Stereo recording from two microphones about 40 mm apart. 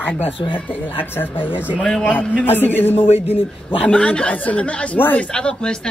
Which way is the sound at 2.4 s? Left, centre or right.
Left.